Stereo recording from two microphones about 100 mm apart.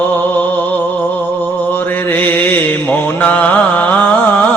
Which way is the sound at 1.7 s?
20° left (ahead or behind).